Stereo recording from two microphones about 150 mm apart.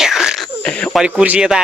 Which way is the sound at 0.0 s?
5° right (ahead or behind).